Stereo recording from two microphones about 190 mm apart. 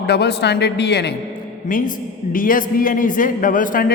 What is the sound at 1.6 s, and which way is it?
Speech, 45° left (ahead or behind).